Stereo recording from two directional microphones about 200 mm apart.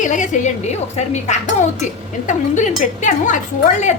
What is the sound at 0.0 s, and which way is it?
A woman's voice, 40° left (ahead or behind).